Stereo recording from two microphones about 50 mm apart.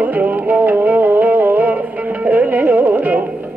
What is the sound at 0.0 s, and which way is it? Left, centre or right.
Music, right.